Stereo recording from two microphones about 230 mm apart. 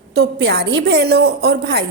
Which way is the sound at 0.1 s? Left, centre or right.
Right.